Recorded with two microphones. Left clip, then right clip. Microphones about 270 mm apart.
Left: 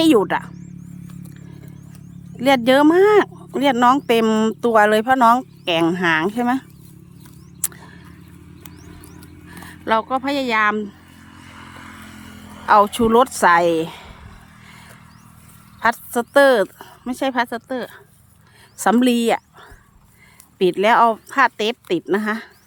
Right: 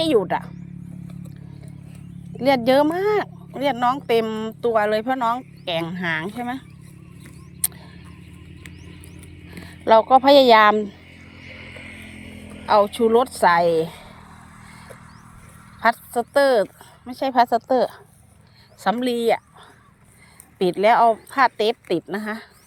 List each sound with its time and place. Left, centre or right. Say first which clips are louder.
0.0 s speech: left 4 dB; centre
2.3 s speech: left 2 dB; centre
7.6 s a sound: left 1 dB; centre
9.1 s a sound: left 1 dB; centre
11.4 s vehicle: right 1 dB; left
12.6 s speech: left 3 dB; centre
15.8 s a woman's voice: left 1 dB; centre
20.6 s speech: left 2 dB; centre